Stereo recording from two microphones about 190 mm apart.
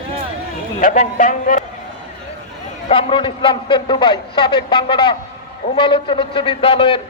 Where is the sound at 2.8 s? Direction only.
30° left (ahead or behind).